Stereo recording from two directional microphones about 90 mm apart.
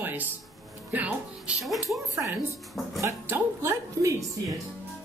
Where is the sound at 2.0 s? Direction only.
35° right (ahead or behind).